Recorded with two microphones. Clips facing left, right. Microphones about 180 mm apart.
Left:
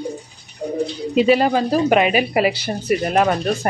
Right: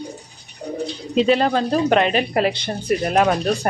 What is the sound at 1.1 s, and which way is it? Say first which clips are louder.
Speech: left 1 dB; 5° left (ahead or behind).